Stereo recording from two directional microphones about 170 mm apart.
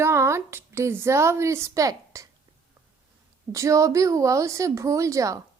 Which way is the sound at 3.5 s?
20° right (ahead or behind).